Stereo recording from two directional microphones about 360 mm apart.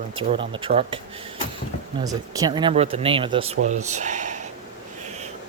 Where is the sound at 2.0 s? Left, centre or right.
Centre.